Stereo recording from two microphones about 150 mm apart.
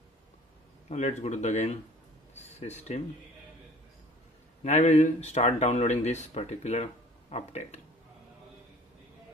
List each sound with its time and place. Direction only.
0.8 s speech: 50° left (ahead or behind)
4.6 s speech: 50° left (ahead or behind)